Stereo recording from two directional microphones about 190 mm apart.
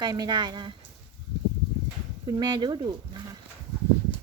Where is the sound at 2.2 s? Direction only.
20° right (ahead or behind).